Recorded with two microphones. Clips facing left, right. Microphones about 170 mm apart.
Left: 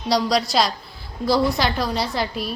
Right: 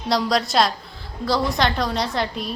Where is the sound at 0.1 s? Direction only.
Centre (ahead or behind).